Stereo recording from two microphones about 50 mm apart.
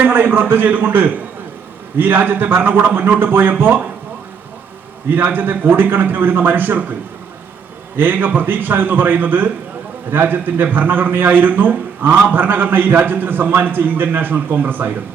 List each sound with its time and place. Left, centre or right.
0.0 s a man's voice: right
5.0 s a man's voice: right
7.9 s a man's voice: right